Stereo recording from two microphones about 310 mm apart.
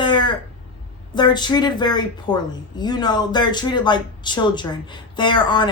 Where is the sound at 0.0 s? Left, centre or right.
Centre.